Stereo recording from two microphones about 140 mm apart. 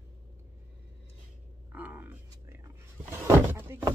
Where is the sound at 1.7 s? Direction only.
10° right (ahead or behind).